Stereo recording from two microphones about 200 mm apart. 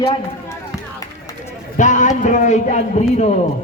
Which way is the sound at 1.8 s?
40° left (ahead or behind).